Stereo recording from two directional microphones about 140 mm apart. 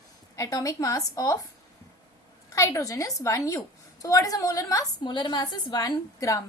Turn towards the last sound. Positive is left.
turn(degrees=25)  # may be behind; listen again after turning